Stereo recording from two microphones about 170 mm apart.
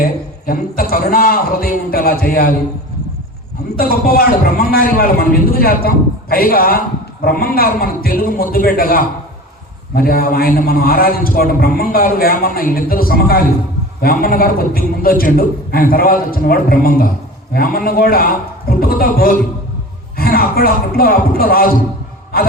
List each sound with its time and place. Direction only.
0.0 s a man's voice: 60° left (ahead or behind)
3.8 s a man's voice: 60° left (ahead or behind)